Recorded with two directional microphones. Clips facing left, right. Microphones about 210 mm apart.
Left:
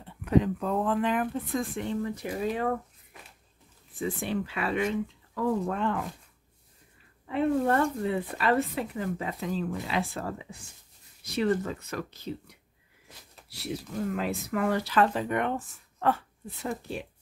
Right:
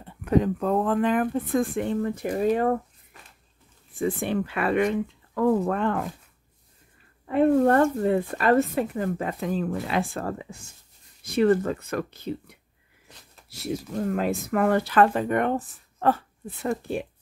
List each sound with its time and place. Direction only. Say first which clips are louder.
0.0 s speech: right 2 dB; 45° right (ahead or behind)
4.0 s speech: right 5 dB; 55° right (ahead or behind)
7.2 s speech: right 6 dB; 50° right (ahead or behind)
13.5 s speech: right 5 dB; 45° right (ahead or behind)
16.4 s speech: right 6 dB; 50° right (ahead or behind)